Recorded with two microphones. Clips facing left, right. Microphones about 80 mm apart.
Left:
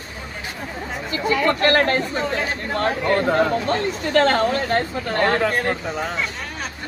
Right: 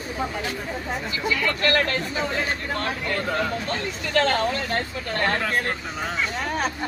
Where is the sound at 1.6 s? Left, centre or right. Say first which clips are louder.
Left 2 dB; left.